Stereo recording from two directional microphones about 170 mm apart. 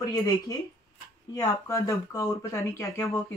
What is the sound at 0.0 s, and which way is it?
Speech, 20° left (ahead or behind).